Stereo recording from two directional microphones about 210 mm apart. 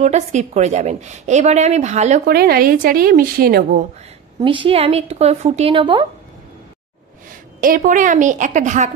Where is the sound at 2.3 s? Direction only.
50° right (ahead or behind).